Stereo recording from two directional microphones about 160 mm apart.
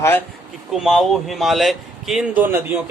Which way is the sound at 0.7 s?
Centre (ahead or behind).